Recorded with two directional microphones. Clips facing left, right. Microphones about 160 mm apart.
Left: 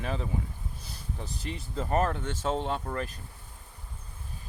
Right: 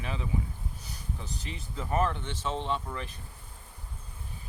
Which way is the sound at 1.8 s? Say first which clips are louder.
Left 2 dB; 45° left (ahead or behind).